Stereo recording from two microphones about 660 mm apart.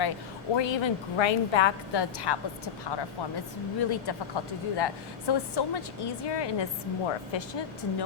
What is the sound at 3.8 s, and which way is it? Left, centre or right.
A woman's voice, left.